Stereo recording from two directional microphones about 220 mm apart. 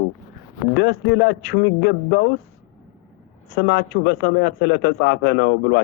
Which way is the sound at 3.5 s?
50° left (ahead or behind).